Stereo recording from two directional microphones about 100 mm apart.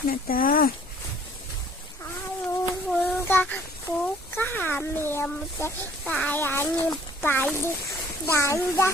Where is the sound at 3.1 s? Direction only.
15° left (ahead or behind).